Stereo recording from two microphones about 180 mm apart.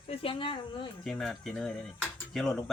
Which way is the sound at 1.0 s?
Centre (ahead or behind).